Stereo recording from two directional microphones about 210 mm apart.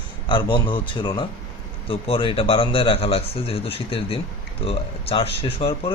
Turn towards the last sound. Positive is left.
turn(degrees=25)  # may be behind; listen again after turning